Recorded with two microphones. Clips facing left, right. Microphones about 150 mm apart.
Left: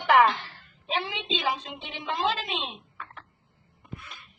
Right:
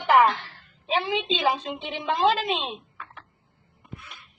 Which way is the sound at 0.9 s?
50° right (ahead or behind).